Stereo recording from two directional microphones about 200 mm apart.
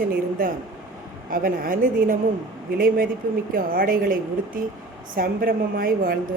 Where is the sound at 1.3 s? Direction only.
45° right (ahead or behind).